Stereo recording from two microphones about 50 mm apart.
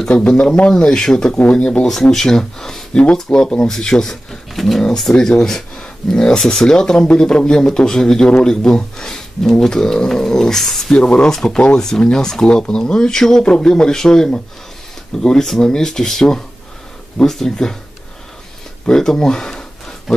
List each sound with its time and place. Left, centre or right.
0.1 s speech: left; by 10.9 s centre
10.9 s speech: centre
18.9 s speech: centre